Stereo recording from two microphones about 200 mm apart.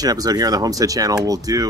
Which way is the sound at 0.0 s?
20° right (ahead or behind).